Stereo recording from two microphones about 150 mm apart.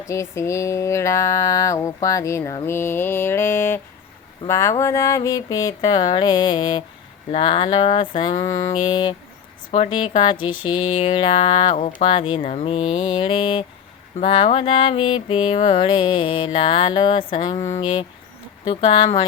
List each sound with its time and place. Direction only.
0.1 s mantra: 20° left (ahead or behind)
6.1 s music: 30° left (ahead or behind); by 11.9 s 50° left (ahead or behind)
12.0 s music: 35° left (ahead or behind)